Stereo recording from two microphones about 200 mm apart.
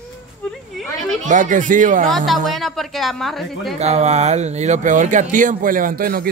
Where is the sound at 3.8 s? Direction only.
35° right (ahead or behind).